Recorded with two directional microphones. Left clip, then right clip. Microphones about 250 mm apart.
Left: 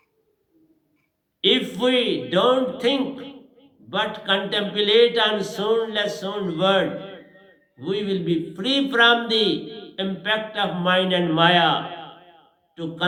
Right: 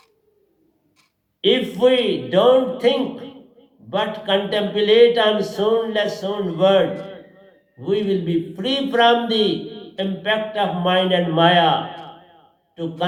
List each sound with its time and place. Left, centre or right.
1.4 s a man's voice: left